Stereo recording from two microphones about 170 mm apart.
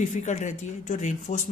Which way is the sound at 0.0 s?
45° left (ahead or behind).